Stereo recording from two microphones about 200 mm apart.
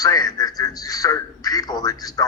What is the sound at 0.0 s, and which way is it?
A man's voice, 20° left (ahead or behind).